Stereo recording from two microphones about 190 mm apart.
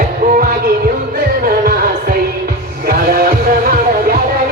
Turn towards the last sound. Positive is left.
turn(degrees=-50)  # may be behind; listen again after turning